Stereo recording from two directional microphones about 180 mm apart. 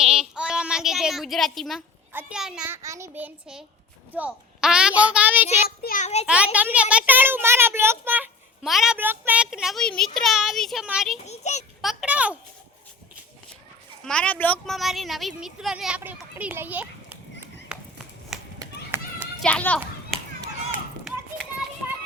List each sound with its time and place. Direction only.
0.0 s a sound: 5° right (ahead or behind)
2.1 s a child's voice: 5° right (ahead or behind)
5.6 s a child's voice: 55° left (ahead or behind)
6.2 s a child's voice: 5° right (ahead or behind)
11.3 s a child's voice: 40° left (ahead or behind)
11.8 s a sound: centre (ahead or behind)
14.0 s speech: 5° left (ahead or behind)
18.6 s run: 15° right (ahead or behind)
19.4 s a child's voice: 5° left (ahead or behind)